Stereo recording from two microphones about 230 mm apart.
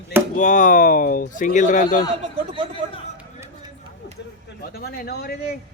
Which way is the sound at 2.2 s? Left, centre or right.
Right.